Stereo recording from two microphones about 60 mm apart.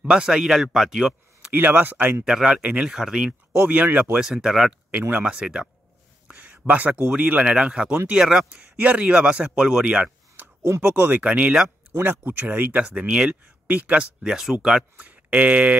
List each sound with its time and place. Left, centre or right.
0.1 s speech: centre
1.5 s speech: right
2.2 s speech: centre
3.6 s a man's voice: right
4.2 s speech: centre
6.2 s a sound: right
7.1 s a man's voice: right
10.8 s a man's voice: right
12.0 s speech: right
12.8 s a man's voice: centre
14.2 s speech: centre
15.0 s speech: right